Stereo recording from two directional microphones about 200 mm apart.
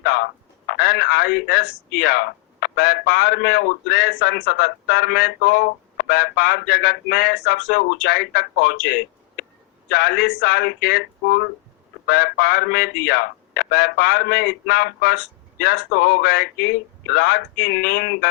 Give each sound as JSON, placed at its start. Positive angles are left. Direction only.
{"t": 0.0, "sound": "a man's voice", "side_deg": 50}